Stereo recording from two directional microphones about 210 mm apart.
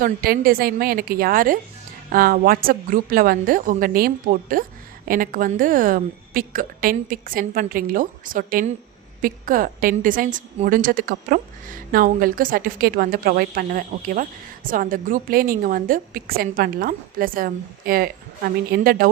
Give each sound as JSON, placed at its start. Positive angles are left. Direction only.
{"t": 0.0, "sound": "a woman's voice", "side_deg": -45}